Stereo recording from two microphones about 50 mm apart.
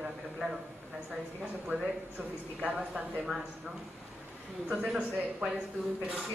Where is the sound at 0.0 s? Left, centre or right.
Centre.